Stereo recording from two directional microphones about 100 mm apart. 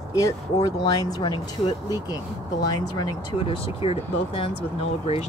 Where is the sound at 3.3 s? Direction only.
70° left (ahead or behind).